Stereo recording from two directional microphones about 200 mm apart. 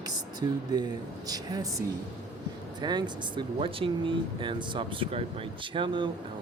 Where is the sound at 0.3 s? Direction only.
20° right (ahead or behind).